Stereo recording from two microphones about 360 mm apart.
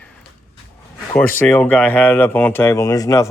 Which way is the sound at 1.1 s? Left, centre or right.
Centre.